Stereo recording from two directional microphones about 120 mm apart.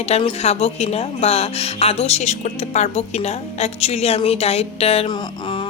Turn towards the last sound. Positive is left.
turn(degrees=55)  # may be behind; listen again after turning